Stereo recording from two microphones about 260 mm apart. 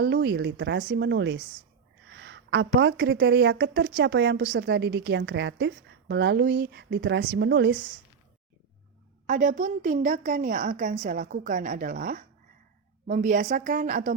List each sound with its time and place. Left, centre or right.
0.0 s a woman's voice: right
9.2 s a woman's voice: right